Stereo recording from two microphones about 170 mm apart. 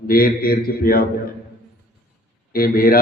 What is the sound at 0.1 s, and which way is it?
A man's voice, 60° left (ahead or behind).